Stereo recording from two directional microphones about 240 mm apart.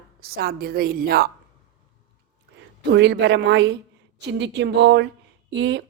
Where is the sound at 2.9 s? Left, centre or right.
Right.